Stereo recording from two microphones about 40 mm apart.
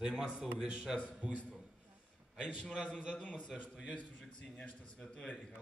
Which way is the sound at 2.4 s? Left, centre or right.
Centre.